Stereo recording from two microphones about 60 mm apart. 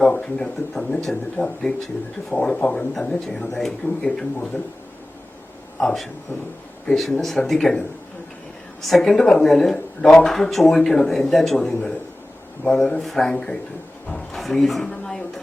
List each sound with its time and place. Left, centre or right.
0.2 s speech: centre
5.8 s speech: centre
10.2 s speech: centre
12.6 s speech: centre
13.0 s speech: centre
14.1 s a sound: centre